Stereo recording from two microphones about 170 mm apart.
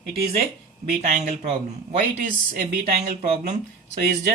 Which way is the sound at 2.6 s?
45° right (ahead or behind).